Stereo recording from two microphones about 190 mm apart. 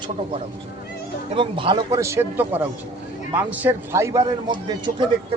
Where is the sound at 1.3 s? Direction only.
25° right (ahead or behind).